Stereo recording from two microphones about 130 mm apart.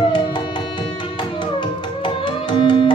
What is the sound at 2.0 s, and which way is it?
Music, 40° left (ahead or behind).